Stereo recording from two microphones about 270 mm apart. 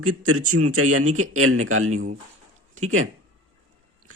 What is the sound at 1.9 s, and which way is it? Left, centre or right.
Speech, right.